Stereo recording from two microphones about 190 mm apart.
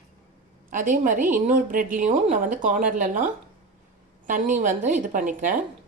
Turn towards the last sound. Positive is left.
turn(degrees=-40)  # may be behind; listen again after turning